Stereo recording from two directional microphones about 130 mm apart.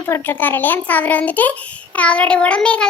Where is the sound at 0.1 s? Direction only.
15° left (ahead or behind).